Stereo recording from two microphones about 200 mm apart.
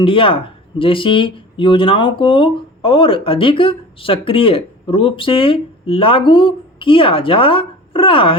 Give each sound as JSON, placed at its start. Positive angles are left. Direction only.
{"t": 0.0, "sound": "speech", "side_deg": 25}